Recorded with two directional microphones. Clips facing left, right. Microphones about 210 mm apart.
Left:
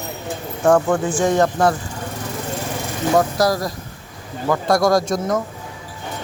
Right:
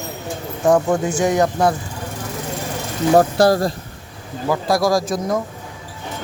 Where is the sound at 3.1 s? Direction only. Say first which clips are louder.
Right 4 dB; 30° right (ahead or behind).